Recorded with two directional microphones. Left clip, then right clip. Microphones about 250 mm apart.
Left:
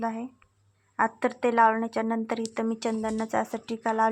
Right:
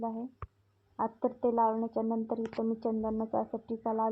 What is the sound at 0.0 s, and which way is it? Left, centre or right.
A woman's voice, left.